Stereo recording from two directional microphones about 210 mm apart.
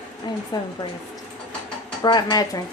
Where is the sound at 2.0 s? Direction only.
20° left (ahead or behind).